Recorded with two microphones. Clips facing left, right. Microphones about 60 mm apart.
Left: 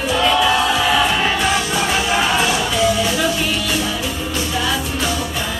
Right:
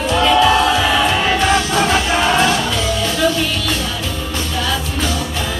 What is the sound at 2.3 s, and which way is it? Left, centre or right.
Music, centre.